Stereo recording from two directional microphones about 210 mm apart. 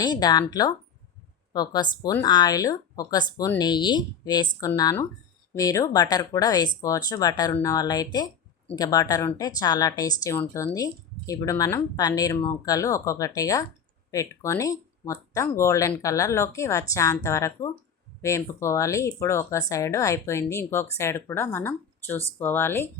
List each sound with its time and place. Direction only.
0.0 s speech: 20° left (ahead or behind)